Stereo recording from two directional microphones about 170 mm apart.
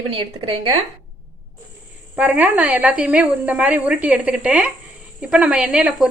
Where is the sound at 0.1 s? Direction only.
35° right (ahead or behind).